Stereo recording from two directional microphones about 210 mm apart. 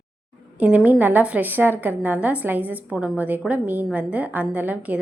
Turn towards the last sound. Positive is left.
turn(degrees=-5)  # may be behind; listen again after turning